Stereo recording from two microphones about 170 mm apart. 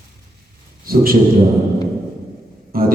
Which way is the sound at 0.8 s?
60° right (ahead or behind).